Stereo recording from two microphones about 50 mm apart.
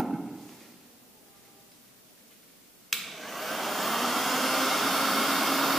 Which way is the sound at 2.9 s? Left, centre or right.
Centre.